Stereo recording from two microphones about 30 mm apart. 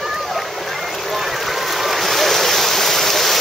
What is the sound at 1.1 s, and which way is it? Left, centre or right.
Stream, centre.